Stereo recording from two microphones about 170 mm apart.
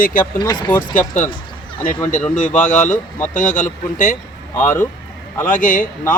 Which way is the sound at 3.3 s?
50° left (ahead or behind).